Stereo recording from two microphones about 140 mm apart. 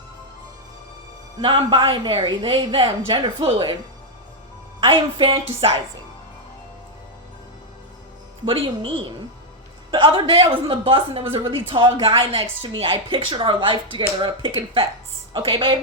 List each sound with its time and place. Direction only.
1.4 s a woman's voice: 40° right (ahead or behind)
4.8 s a woman's voice: 40° right (ahead or behind)
8.4 s a woman's voice: 40° right (ahead or behind)